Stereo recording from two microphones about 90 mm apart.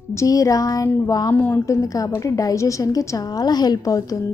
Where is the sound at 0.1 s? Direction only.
35° left (ahead or behind).